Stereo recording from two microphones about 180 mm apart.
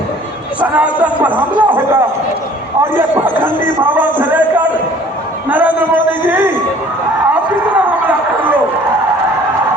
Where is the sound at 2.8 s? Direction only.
10° right (ahead or behind).